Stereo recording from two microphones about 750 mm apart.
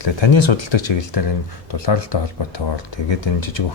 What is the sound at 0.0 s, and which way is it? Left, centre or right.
Speech, left.